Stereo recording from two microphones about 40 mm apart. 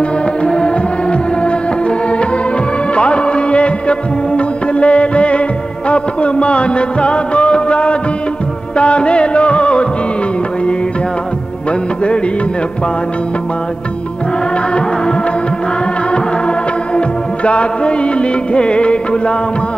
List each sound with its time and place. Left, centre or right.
0.4 s music: left
17.5 s music: left